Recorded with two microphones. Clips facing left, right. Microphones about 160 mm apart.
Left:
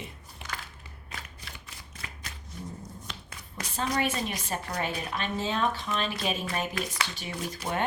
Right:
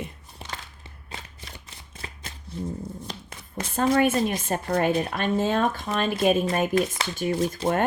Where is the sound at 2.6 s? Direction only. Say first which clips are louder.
Right 9 dB; 25° right (ahead or behind).